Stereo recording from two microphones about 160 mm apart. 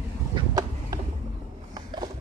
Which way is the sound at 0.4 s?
20° right (ahead or behind).